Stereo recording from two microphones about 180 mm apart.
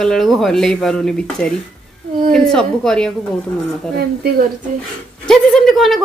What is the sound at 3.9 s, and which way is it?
Speech, 60° right (ahead or behind).